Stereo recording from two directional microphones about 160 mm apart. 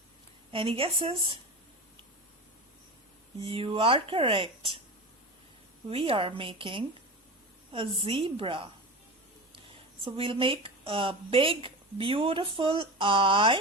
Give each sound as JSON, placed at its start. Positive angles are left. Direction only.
{"t": 0.5, "sound": "a woman's voice", "side_deg": -35}
{"t": 3.4, "sound": "a woman's voice", "side_deg": -35}
{"t": 5.9, "sound": "a woman's voice", "side_deg": -35}
{"t": 8.0, "sound": "a woman's voice", "side_deg": -35}
{"t": 10.0, "sound": "a woman's voice", "side_deg": -35}